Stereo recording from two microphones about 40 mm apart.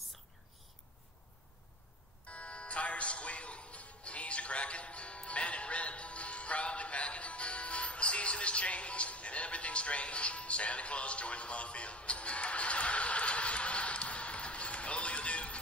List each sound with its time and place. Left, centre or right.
2.2 s music: left